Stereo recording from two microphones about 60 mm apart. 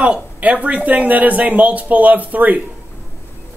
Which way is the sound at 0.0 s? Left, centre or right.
Right.